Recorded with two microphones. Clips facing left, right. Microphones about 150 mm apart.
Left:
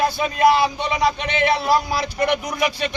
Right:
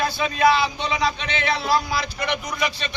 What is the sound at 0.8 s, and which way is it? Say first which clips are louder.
Speech: left 3 dB; 15° left (ahead or behind).